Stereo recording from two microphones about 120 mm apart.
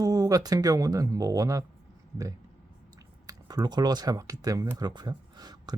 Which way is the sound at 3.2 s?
35° right (ahead or behind).